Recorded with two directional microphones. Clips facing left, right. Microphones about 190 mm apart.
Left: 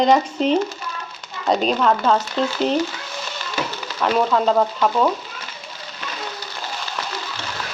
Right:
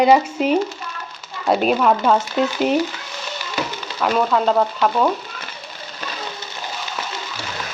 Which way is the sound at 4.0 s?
Centre (ahead or behind).